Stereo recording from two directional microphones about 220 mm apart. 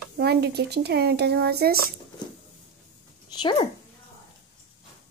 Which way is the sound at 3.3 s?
20° left (ahead or behind).